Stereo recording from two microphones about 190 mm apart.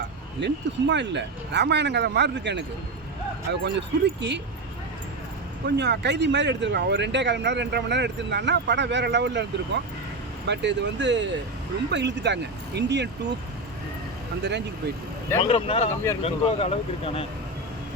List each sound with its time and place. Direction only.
0.3 s speech: 65° right (ahead or behind)
5.6 s speech: 60° right (ahead or behind)
15.4 s speech: 30° left (ahead or behind)